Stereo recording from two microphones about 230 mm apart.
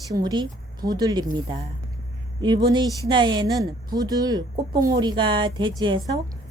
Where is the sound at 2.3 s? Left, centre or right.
Centre.